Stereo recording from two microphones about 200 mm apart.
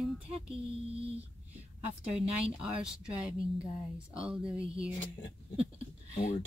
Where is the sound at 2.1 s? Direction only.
5° right (ahead or behind).